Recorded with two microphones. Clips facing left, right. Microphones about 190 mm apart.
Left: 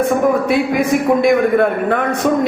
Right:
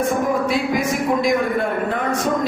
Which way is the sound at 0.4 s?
60° left (ahead or behind).